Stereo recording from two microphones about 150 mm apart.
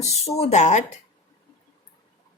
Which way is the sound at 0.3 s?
50° left (ahead or behind).